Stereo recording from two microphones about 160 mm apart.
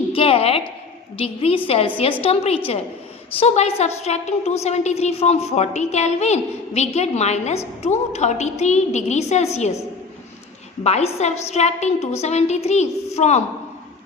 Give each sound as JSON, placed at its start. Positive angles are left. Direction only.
{"t": 0.1, "sound": "a woman's voice", "side_deg": 35}
{"t": 10.8, "sound": "a woman's voice", "side_deg": 45}